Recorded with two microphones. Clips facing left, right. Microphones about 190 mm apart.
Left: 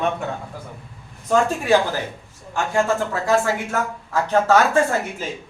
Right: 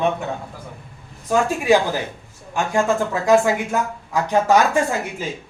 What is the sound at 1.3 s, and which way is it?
Speech, 15° right (ahead or behind).